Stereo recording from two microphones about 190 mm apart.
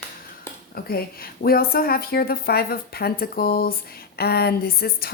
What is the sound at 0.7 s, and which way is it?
A woman's voice, 55° left (ahead or behind).